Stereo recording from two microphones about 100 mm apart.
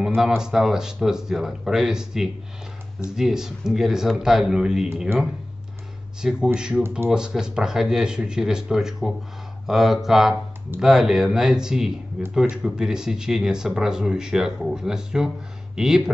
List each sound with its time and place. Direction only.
0.0 s music: 5° right (ahead or behind)
0.4 s speech: 5° right (ahead or behind)
5.1 s speech: 25° right (ahead or behind)
6.2 s speech: 10° right (ahead or behind)